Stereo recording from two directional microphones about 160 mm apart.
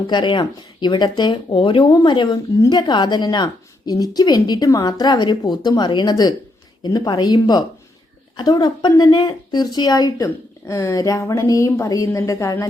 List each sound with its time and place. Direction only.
0.1 s speech: 30° left (ahead or behind)